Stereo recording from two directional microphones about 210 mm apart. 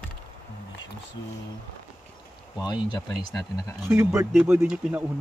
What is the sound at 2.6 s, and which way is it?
Speech, 20° left (ahead or behind).